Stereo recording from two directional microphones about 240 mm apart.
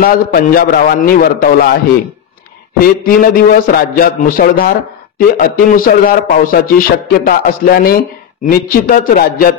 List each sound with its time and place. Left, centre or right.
0.0 s speech: left
3.0 s speech: left